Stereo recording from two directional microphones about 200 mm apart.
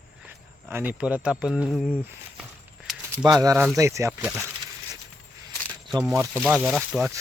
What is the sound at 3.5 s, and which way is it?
Speech, centre (ahead or behind).